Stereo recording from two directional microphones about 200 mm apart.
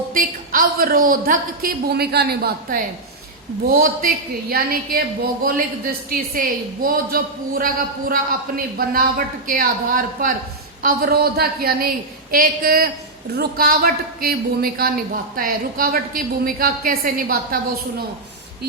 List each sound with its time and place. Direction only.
0.1 s a woman's voice: 45° right (ahead or behind)